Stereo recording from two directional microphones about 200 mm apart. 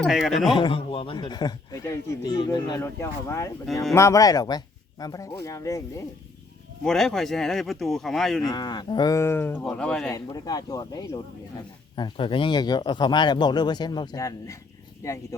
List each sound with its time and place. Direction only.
0.0 s speech: centre (ahead or behind)
0.5 s a man's voice: 25° left (ahead or behind)
6.8 s speech: centre (ahead or behind)
8.4 s speech: 20° left (ahead or behind); by 10.1 s 5° left (ahead or behind)
10.1 s a man's voice: 15° left (ahead or behind)